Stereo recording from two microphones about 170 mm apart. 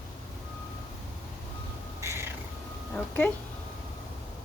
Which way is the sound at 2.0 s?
15° right (ahead or behind).